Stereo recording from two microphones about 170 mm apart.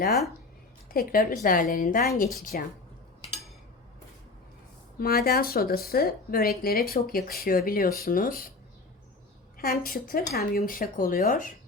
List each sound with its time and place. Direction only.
0.9 s speech: 60° left (ahead or behind)
4.9 s speech: 65° left (ahead or behind)
9.6 s speech: 60° left (ahead or behind)